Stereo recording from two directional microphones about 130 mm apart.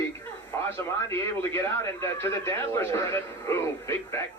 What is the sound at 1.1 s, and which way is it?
Speech, 20° left (ahead or behind).